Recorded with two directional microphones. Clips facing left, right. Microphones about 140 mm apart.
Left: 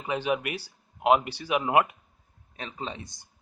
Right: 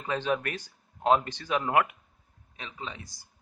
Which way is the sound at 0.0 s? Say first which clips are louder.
Left 1 dB; 15° left (ahead or behind).